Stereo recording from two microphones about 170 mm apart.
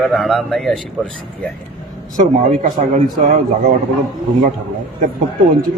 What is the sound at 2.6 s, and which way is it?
Speech, 50° right (ahead or behind).